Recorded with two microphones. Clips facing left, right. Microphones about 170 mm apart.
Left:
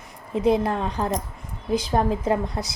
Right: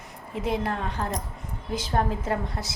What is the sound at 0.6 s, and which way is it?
A woman's voice, 25° left (ahead or behind).